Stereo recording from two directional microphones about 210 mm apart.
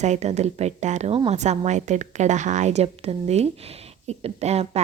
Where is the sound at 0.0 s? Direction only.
35° right (ahead or behind).